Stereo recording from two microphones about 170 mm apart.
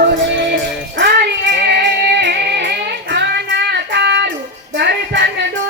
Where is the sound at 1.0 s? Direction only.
80° right.